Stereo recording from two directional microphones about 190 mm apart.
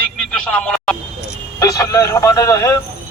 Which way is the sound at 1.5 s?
20° left (ahead or behind).